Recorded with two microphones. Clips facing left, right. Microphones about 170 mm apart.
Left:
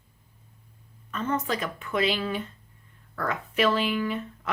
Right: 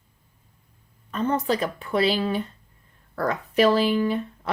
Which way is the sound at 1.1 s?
35° right (ahead or behind).